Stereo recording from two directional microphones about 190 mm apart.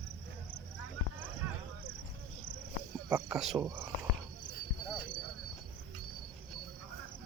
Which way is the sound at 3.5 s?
15° right (ahead or behind).